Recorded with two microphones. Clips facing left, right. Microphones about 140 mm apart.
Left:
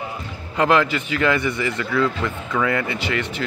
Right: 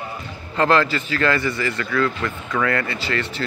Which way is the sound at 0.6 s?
15° left (ahead or behind).